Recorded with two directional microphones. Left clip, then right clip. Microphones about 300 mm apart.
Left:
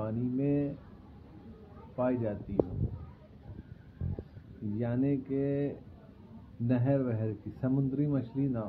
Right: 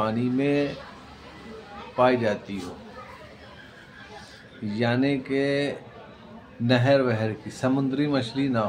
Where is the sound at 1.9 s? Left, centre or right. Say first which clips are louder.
Right 11 dB; centre.